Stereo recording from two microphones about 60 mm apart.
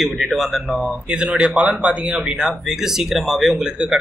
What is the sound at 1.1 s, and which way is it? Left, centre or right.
Speech, centre.